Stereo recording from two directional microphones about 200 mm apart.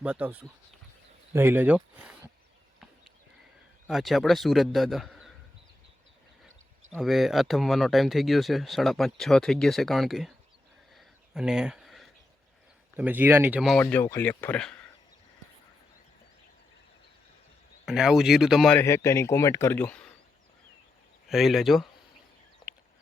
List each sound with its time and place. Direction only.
0.0 s speech: 5° right (ahead or behind)
3.8 s speech: centre (ahead or behind)
6.9 s speech: centre (ahead or behind)
10.9 s a sound: 5° right (ahead or behind)
13.0 s speech: 10° right (ahead or behind)
13.8 s speech: 15° left (ahead or behind)
17.8 s speech: centre (ahead or behind)
21.2 s speech: centre (ahead or behind)